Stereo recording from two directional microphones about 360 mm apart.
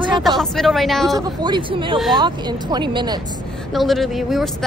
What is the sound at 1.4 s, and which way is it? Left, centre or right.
Speech, centre.